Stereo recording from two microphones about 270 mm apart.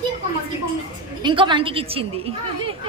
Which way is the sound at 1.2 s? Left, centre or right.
Centre.